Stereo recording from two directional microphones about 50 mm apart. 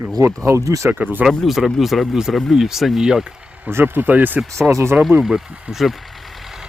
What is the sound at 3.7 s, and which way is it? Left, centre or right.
Speech, right.